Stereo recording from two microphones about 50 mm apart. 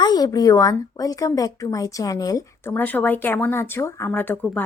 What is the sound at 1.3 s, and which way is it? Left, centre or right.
Speech, left.